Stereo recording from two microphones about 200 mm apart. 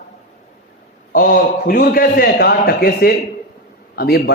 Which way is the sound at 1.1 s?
45° left (ahead or behind).